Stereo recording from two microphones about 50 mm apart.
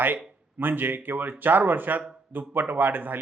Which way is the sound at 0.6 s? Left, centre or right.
Right.